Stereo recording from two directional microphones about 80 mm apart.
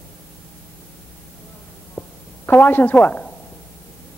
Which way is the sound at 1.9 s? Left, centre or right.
Left.